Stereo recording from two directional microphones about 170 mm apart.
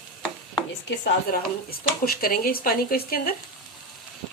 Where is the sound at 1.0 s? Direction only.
60° left (ahead or behind).